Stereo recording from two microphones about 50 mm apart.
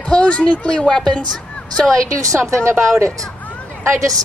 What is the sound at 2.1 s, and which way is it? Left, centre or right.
Speech, right.